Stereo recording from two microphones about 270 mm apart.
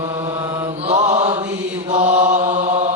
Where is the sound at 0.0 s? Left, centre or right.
Centre.